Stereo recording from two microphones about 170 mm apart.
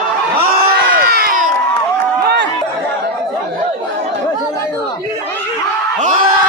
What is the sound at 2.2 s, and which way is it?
Chatter, 75° right (ahead or behind).